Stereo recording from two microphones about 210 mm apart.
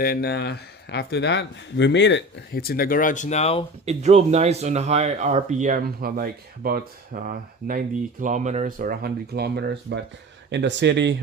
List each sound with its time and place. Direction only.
0.0 s speech: 45° left (ahead or behind); by 3.6 s 30° left (ahead or behind)
3.8 s speech: 30° right (ahead or behind); by 11.1 s 55° right (ahead or behind)